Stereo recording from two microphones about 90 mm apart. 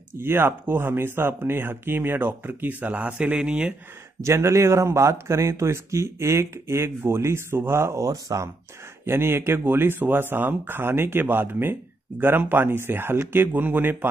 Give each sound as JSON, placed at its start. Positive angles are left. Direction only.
{"t": 0.1, "sound": "speech", "side_deg": -25}
{"t": 4.2, "sound": "speech", "side_deg": -35}
{"t": 9.0, "sound": "speech", "side_deg": -30}